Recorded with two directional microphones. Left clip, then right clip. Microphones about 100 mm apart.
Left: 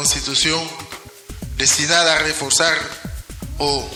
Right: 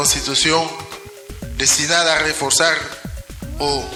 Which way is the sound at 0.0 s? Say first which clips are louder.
Right 1 dB; 15° left (ahead or behind).